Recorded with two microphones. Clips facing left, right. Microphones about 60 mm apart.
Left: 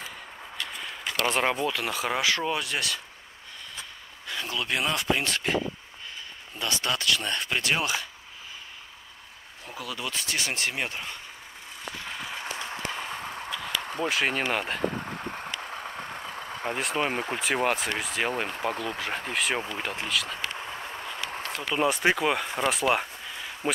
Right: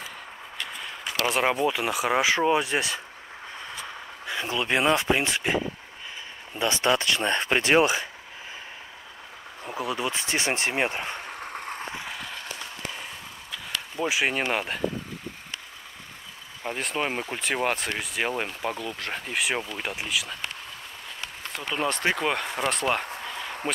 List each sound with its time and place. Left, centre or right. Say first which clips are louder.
0.7 s speech: even; centre; by 3.0 s right
4.3 s speech: right 4 dB; right
6.6 s speech: right 5 dB; right
9.7 s speech: right 6 dB; right
11.5 s a sound: right 10 dB; right
12.1 s applause: even; centre
14.0 s speech: right 2 dB; centre
16.6 s speech: even; centre
21.5 s speech: left 2 dB; centre